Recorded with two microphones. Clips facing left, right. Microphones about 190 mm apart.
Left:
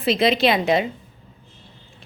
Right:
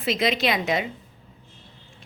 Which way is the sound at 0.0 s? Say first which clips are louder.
Left 5 dB; 30° left (ahead or behind).